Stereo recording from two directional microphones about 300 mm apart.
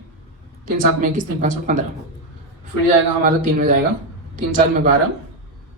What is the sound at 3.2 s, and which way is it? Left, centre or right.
Speech, right.